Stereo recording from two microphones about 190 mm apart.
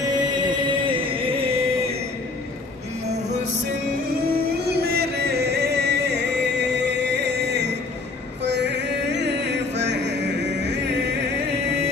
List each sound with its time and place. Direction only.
0.0 s music: 25° right (ahead or behind)
4.3 s music: 55° right (ahead or behind)